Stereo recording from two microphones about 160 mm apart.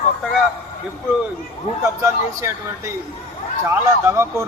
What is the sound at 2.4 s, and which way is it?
A man's voice, 20° right (ahead or behind).